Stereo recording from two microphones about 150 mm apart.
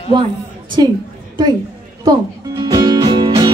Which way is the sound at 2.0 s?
25° right (ahead or behind).